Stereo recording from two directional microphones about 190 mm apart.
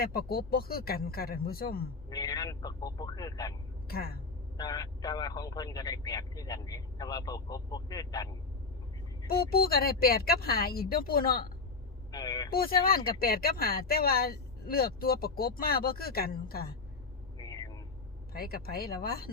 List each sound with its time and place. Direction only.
0.0 s speech: 55° left (ahead or behind)
2.0 s speech: 20° left (ahead or behind)
3.8 s speech: 55° left (ahead or behind)
4.5 s speech: 20° left (ahead or behind)
9.5 s speech: 55° left (ahead or behind)
12.1 s speech: 20° left (ahead or behind)
12.5 s speech: 50° left (ahead or behind)
17.3 s vehicle: 20° left (ahead or behind)
18.3 s speech: 55° left (ahead or behind)